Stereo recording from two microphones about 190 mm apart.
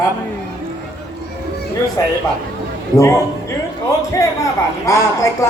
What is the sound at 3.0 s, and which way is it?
Speech, 15° left (ahead or behind).